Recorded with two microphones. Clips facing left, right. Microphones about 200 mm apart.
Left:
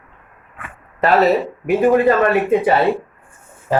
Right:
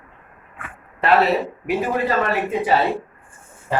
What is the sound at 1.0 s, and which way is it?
Speech, 45° left (ahead or behind).